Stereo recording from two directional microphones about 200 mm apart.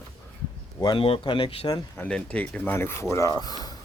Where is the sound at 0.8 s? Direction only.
25° left (ahead or behind).